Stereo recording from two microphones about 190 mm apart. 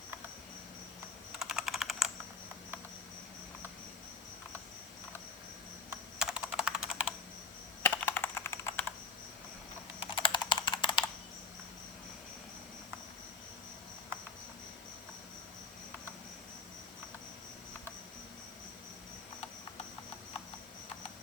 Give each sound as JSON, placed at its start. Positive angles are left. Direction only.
{"t": 1.4, "sound": "computer keyboard", "side_deg": 0}
{"t": 5.9, "sound": "computer keyboard", "side_deg": -5}
{"t": 7.8, "sound": "computer keyboard", "side_deg": 10}
{"t": 10.2, "sound": "a sound", "side_deg": 25}